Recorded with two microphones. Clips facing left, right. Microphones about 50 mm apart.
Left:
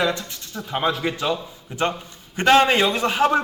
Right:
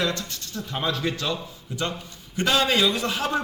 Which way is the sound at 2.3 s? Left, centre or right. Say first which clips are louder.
Left 6 dB; left.